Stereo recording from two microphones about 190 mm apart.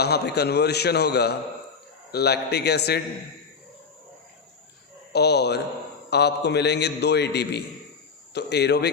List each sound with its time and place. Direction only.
0.0 s a man's voice: 60° left (ahead or behind)
5.1 s a man's voice: 60° left (ahead or behind)